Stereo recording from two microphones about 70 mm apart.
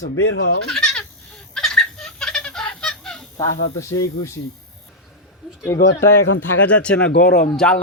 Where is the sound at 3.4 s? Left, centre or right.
Left.